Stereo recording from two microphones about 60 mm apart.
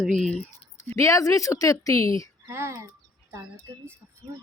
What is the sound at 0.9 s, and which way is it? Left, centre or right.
A woman's voice, left.